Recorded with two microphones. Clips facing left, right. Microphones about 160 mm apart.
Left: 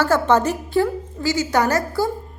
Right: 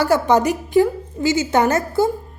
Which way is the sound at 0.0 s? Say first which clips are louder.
Right 1 dB; 15° right (ahead or behind).